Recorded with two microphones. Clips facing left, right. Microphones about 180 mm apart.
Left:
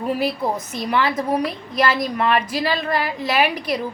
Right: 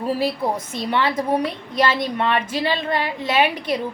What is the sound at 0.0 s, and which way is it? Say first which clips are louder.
A woman's voice: even; 30° right (ahead or behind).